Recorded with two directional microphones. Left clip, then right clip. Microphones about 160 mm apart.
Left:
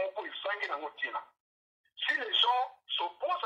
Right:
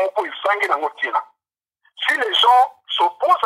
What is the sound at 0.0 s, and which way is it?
Speech, 30° right (ahead or behind).